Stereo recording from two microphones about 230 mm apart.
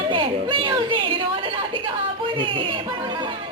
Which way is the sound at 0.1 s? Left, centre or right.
Right.